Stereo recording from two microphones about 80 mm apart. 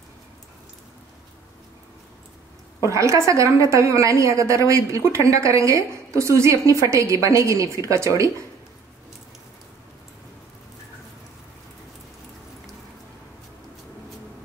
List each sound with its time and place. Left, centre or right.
2.8 s a woman's voice: right